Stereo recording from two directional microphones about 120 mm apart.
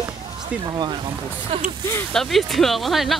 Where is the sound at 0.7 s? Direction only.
35° right (ahead or behind).